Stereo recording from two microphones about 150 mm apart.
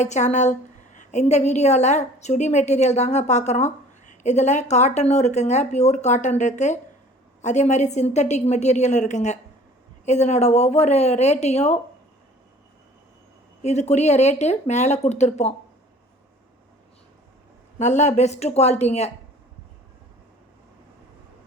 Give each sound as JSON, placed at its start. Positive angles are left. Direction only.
{"t": 0.0, "sound": "a woman's voice", "side_deg": 50}
{"t": 13.6, "sound": "a woman's voice", "side_deg": 50}
{"t": 17.7, "sound": "a woman's voice", "side_deg": 50}